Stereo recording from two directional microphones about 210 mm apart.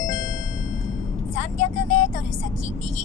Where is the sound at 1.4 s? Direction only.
35° left (ahead or behind).